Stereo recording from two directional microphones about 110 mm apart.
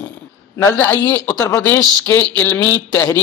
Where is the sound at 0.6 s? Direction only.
20° left (ahead or behind).